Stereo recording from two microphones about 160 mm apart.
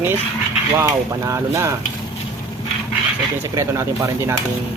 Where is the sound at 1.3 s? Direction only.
20° right (ahead or behind).